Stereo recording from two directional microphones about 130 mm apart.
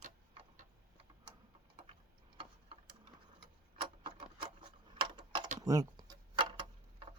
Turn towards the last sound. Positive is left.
turn(degrees=-35)  # may be behind; listen again after turning